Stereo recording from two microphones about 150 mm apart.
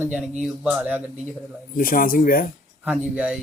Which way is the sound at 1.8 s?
70° left (ahead or behind).